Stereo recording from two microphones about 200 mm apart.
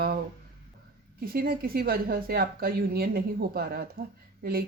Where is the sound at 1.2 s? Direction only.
50° right (ahead or behind).